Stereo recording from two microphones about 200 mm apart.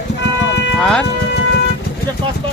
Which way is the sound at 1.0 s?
60° left (ahead or behind).